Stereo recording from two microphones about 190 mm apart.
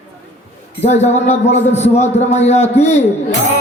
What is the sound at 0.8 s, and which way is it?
Speech, 35° left (ahead or behind).